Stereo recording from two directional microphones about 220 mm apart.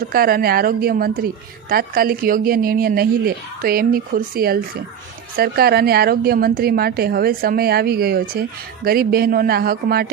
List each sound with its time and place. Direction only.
0.0 s a woman's voice: 40° right (ahead or behind)